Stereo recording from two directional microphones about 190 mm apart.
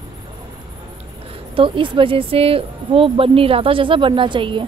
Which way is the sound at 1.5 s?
25° right (ahead or behind).